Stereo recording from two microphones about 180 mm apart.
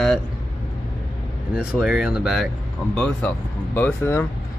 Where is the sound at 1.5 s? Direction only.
5° right (ahead or behind).